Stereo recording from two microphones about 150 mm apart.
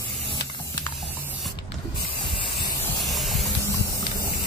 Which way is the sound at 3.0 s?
Centre (ahead or behind).